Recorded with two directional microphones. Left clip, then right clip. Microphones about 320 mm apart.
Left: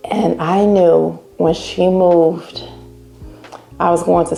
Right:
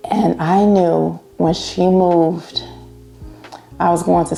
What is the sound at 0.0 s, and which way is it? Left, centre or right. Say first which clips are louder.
Speech: left 1 dB; right.